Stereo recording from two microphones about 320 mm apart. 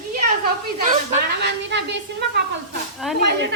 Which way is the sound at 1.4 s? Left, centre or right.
Right.